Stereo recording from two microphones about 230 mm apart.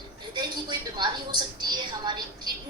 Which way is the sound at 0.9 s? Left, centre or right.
Centre.